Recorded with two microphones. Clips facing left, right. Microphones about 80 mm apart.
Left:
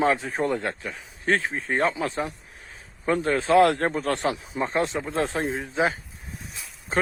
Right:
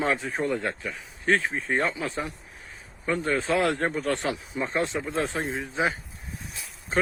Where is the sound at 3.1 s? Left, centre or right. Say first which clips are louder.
Left 4 dB; left.